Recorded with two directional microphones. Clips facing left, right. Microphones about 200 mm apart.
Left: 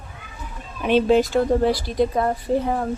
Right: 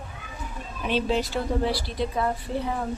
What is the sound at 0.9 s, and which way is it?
Speech, 55° left (ahead or behind).